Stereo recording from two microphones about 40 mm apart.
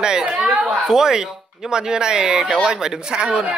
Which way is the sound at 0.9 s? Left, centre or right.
Centre.